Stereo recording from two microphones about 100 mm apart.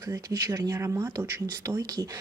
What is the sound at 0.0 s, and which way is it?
Speech, 35° right (ahead or behind).